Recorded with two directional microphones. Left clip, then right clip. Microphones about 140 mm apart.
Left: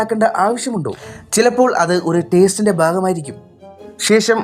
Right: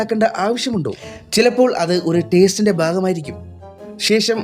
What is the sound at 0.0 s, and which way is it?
Speech, 35° right (ahead or behind).